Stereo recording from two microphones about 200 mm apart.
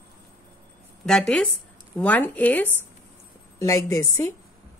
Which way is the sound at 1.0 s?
5° left (ahead or behind).